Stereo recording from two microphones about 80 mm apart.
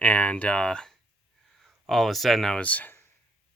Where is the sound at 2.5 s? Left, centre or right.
Centre.